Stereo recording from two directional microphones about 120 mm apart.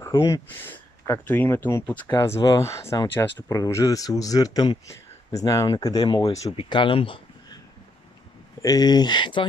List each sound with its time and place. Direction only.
0.5 s speech: 20° left (ahead or behind)
2.1 s speech: 30° left (ahead or behind); by 7.2 s 45° left (ahead or behind)
8.6 s speech: 35° left (ahead or behind)